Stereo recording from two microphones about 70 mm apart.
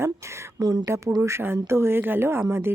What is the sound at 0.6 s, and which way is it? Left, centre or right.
Speech, right.